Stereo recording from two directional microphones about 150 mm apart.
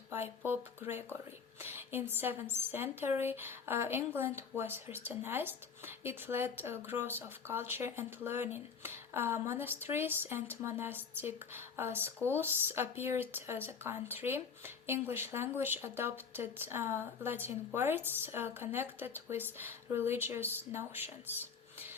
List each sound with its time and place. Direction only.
0.4 s speech: 15° right (ahead or behind)